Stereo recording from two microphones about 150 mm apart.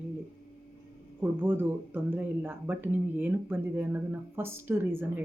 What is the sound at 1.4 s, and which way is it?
Speech, 15° right (ahead or behind).